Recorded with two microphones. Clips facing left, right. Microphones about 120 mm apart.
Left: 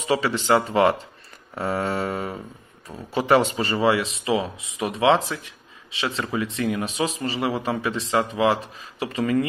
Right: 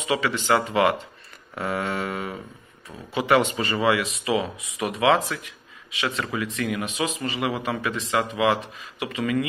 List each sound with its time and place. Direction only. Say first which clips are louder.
0.0 s speech: left 2 dB; 35° left (ahead or behind)